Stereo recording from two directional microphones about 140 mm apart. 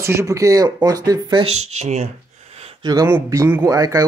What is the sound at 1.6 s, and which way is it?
Speech, 55° right (ahead or behind).